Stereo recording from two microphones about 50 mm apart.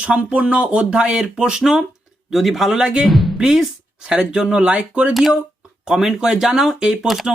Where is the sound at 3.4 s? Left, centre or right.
Centre.